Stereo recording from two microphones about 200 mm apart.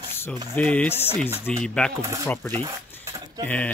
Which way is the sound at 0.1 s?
10° left (ahead or behind).